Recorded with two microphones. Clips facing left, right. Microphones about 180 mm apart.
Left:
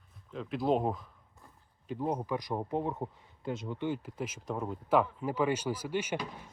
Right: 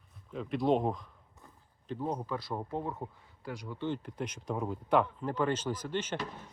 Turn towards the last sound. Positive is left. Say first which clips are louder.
# left 1 dB
turn(degrees=10)  # may be behind; listen again after turning